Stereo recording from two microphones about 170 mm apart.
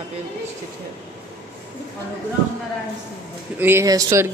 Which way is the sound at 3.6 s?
15° right (ahead or behind).